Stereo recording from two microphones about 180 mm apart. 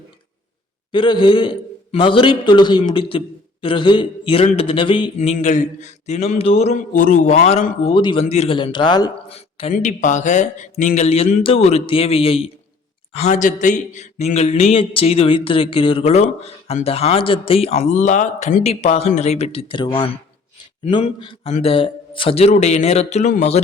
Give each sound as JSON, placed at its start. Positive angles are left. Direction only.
{"t": 0.9, "sound": "a man's voice", "side_deg": 25}
{"t": 9.3, "sound": "speech", "side_deg": 35}